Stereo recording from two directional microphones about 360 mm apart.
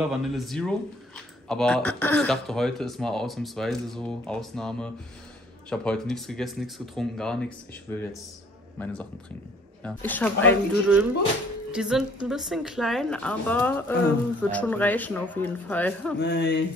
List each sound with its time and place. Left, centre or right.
0.1 s a man's voice: centre
16.2 s speech: left